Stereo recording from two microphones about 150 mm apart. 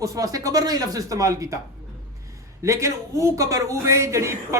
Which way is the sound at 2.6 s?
20° right (ahead or behind).